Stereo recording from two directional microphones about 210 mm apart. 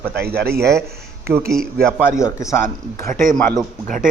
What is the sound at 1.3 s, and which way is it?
Speech, 10° right (ahead or behind).